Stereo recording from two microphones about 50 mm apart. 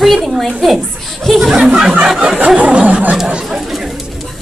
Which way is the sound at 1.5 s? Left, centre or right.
Right.